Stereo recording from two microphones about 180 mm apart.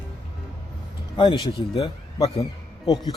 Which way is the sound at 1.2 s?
25° left (ahead or behind).